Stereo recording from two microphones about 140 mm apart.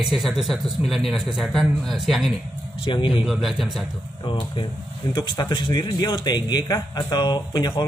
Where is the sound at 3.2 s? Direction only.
Centre (ahead or behind).